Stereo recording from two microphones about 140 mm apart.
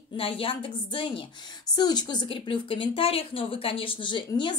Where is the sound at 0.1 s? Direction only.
40° left (ahead or behind).